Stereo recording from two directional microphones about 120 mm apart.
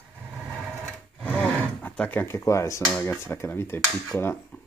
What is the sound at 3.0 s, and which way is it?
Speech, 20° left (ahead or behind).